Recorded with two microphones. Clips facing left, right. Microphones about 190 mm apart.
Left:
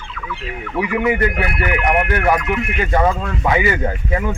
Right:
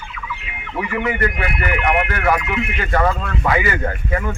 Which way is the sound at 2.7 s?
15° left (ahead or behind).